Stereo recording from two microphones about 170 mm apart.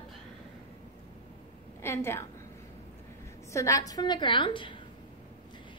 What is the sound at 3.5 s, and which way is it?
A woman's voice, 20° left (ahead or behind).